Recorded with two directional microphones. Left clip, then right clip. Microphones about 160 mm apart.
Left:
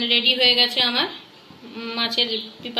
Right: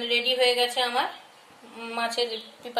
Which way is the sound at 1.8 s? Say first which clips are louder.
Left 5 dB; 60° right (ahead or behind).